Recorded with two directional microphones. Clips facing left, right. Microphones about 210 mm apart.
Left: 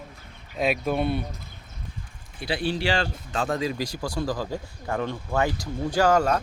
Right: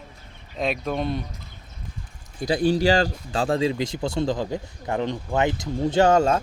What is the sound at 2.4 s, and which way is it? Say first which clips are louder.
Speech: right 6 dB; 40° right (ahead or behind).